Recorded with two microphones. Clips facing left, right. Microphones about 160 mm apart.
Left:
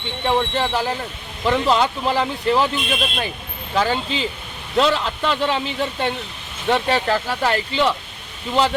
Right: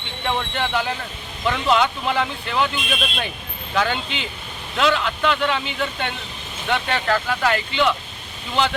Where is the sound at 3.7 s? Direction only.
35° left (ahead or behind).